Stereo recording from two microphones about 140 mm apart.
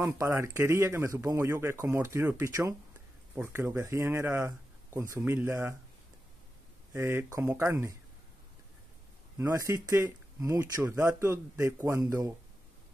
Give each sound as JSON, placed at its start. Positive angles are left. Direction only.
{"t": 0.0, "sound": "speech", "side_deg": -20}
{"t": 6.9, "sound": "speech", "side_deg": -15}
{"t": 9.4, "sound": "speech", "side_deg": -20}